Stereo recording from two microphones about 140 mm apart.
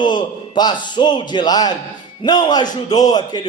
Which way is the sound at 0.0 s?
30° left (ahead or behind).